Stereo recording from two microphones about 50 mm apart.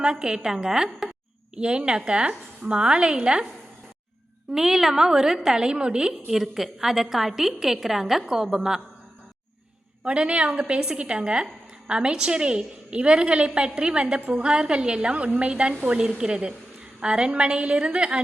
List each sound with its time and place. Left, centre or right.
0.0 s a woman's voice: centre
4.5 s a woman's voice: centre
10.0 s a woman's voice: right